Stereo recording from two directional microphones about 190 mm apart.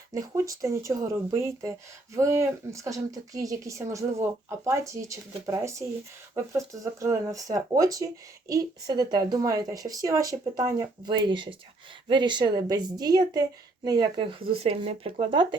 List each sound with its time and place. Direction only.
0.1 s speech: 15° right (ahead or behind)
7.0 s speech: 15° right (ahead or behind)